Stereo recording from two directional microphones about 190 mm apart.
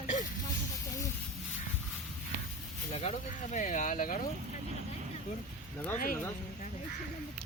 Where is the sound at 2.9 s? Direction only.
35° left (ahead or behind).